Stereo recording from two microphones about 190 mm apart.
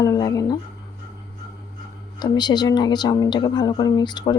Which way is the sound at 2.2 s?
20° left (ahead or behind).